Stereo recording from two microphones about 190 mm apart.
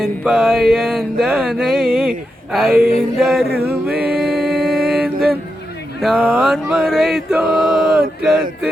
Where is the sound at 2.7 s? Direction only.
55° right (ahead or behind).